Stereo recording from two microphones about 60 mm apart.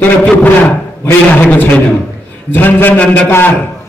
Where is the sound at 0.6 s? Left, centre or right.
Left.